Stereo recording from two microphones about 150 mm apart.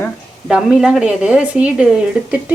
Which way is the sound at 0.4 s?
5° right (ahead or behind).